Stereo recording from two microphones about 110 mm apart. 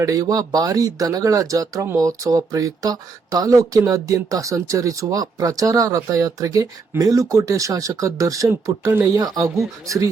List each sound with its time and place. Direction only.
0.0 s speech: 30° right (ahead or behind)
9.1 s speech: 35° right (ahead or behind)